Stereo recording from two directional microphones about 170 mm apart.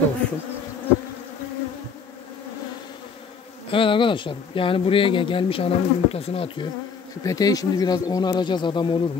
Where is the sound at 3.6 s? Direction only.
30° left (ahead or behind).